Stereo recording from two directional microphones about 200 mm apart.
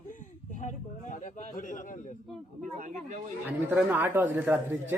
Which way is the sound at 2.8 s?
40° right (ahead or behind).